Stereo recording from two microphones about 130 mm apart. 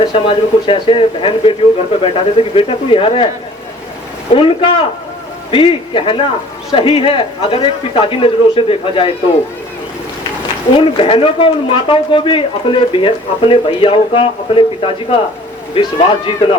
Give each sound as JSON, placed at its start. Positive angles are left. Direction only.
{"t": 0.0, "sound": "a man's voice", "side_deg": 45}
{"t": 4.3, "sound": "a man's voice", "side_deg": 45}
{"t": 10.8, "sound": "a man's voice", "side_deg": 45}